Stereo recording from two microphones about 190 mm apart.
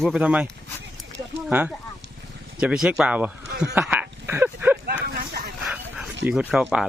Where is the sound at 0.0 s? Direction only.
5° right (ahead or behind).